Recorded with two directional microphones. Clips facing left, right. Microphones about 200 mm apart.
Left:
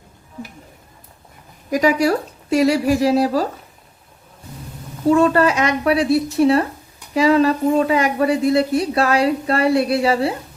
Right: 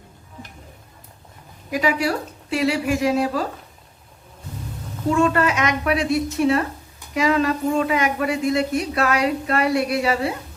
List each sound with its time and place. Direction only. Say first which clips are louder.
1.7 s a woman's voice: left 5 dB; 40° left (ahead or behind)
5.0 s a woman's voice: left 5 dB; 35° left (ahead or behind)